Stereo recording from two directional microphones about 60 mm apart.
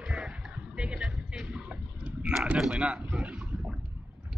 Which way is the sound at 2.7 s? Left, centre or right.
Centre.